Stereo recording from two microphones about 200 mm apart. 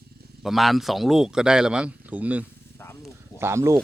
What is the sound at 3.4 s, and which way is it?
Speech, 15° right (ahead or behind).